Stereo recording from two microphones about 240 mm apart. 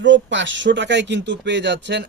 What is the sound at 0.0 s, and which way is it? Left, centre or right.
A man's voice, right.